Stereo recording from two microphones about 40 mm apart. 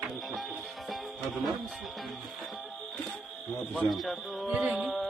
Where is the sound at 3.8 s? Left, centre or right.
Centre.